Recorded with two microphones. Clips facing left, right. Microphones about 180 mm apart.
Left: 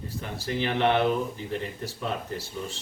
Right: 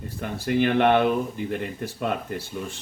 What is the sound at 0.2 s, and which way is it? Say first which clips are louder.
Speech: right 7 dB; 55° right (ahead or behind).